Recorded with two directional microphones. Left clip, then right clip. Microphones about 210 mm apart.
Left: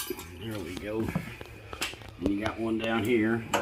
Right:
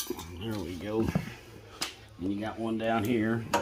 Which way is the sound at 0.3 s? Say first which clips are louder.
Even; 60° right (ahead or behind).